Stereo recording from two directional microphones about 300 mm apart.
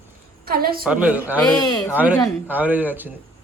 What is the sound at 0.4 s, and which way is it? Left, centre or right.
Speech, right.